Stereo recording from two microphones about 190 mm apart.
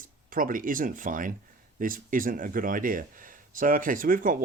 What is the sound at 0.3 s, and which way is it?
Speech, 45° right (ahead or behind).